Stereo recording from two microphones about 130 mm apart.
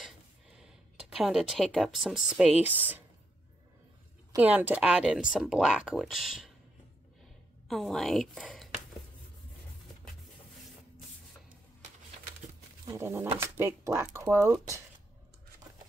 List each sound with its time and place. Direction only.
0.6 s speech: 5° right (ahead or behind)
4.4 s speech: 10° right (ahead or behind)
7.6 s speech: centre (ahead or behind)
12.8 s speech: 20° right (ahead or behind)